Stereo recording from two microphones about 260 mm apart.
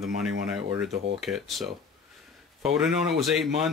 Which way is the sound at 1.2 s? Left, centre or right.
Centre.